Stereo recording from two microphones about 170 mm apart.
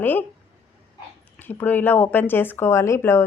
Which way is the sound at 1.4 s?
10° left (ahead or behind).